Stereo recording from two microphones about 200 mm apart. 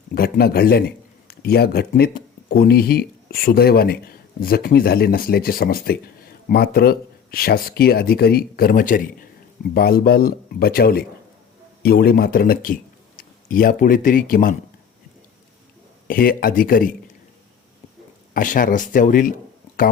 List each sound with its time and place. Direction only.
0.1 s a man's voice: 50° left (ahead or behind)
16.0 s speech: 45° left (ahead or behind)
18.3 s speech: 45° left (ahead or behind)